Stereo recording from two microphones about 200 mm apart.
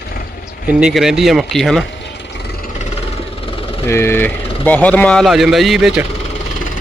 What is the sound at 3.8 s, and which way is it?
Speech, 10° left (ahead or behind).